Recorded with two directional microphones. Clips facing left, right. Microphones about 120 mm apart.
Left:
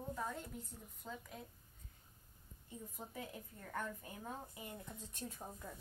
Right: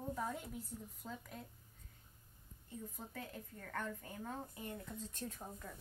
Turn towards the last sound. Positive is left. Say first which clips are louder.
# right 1 dB
turn(degrees=10)  # may be behind; listen again after turning